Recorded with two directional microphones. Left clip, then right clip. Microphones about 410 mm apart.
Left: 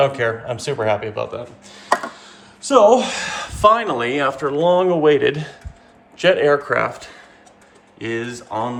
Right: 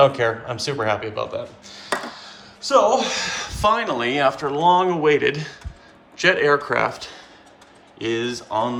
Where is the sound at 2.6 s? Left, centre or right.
Centre.